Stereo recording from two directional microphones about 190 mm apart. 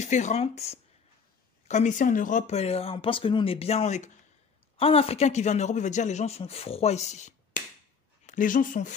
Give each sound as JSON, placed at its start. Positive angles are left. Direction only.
{"t": 0.0, "sound": "a man's voice", "side_deg": 40}